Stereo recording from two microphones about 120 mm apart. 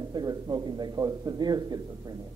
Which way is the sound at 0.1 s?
35° right (ahead or behind).